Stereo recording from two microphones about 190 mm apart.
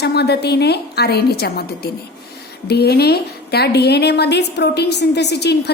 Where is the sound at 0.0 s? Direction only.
60° left (ahead or behind).